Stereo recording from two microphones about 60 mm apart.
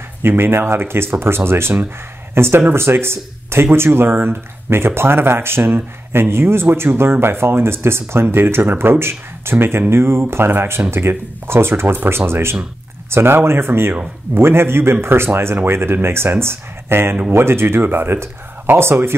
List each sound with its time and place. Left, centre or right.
0.2 s speech: right